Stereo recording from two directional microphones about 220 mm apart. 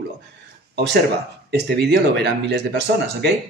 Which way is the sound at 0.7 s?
50° right (ahead or behind).